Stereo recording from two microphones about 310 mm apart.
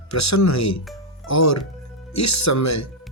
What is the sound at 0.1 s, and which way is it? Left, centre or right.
Speech, left.